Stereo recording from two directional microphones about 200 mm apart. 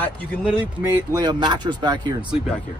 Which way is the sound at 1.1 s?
20° right (ahead or behind).